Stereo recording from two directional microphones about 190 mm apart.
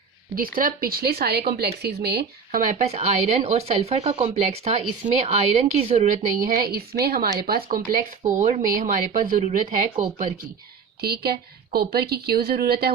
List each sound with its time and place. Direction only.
0.3 s speech: 50° right (ahead or behind); by 6.1 s 35° right (ahead or behind)
6.4 s speech: 50° right (ahead or behind)
11.0 s speech: 55° right (ahead or behind)